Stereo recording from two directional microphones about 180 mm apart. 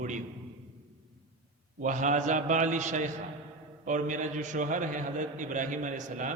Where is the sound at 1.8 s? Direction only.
45° right (ahead or behind).